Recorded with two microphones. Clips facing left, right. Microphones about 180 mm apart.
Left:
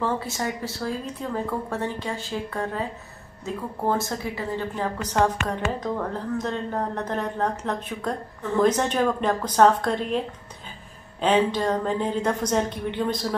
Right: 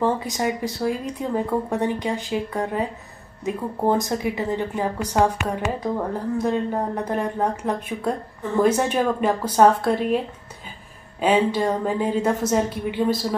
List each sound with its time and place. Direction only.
0.0 s a woman's voice: 15° right (ahead or behind)